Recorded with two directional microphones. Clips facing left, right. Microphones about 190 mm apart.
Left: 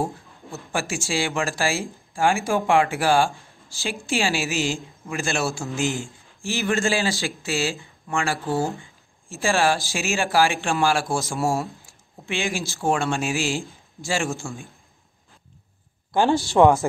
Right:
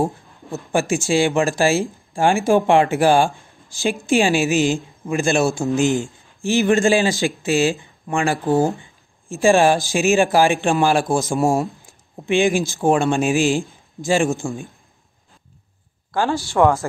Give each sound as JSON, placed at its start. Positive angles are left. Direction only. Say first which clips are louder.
{"t": 0.5, "sound": "a man's voice", "louder": "right 8 dB", "side_deg": -20}
{"t": 16.1, "sound": "speech", "louder": "left 1 dB", "side_deg": 20}